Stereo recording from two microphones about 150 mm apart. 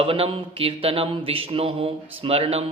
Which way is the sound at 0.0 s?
40° right (ahead or behind).